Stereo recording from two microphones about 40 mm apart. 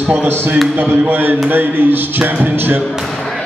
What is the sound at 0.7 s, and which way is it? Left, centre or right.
Music, right.